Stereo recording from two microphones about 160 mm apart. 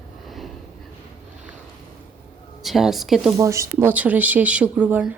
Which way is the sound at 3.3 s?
20° right (ahead or behind).